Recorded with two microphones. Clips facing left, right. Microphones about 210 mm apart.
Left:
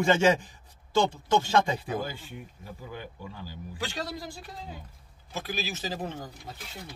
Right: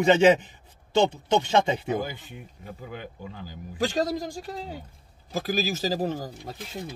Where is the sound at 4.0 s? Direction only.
45° right (ahead or behind).